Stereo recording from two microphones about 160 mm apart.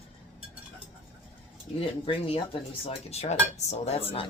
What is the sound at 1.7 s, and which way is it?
Dishes, 35° left (ahead or behind).